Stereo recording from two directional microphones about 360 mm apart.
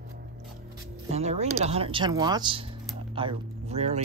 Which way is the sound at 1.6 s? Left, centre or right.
Centre.